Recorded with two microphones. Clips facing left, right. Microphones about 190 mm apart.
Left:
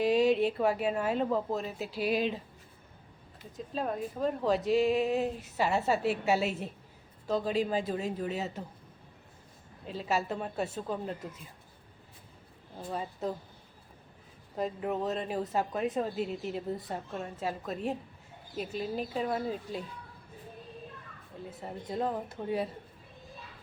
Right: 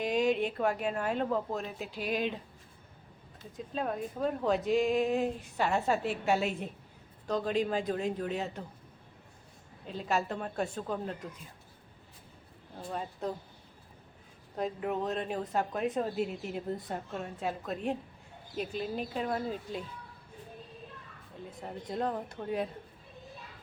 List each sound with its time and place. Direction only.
0.0 s speech: centre (ahead or behind)
3.6 s speech: centre (ahead or behind)
9.8 s speech: 5° left (ahead or behind)
12.9 s speech: centre (ahead or behind)
14.5 s speech: centre (ahead or behind)
21.6 s speech: 5° left (ahead or behind)